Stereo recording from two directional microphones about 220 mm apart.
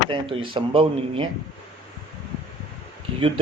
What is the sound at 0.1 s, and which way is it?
Speech, 25° right (ahead or behind).